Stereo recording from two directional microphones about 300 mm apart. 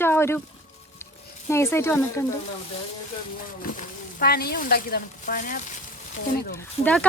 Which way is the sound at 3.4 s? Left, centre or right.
Left.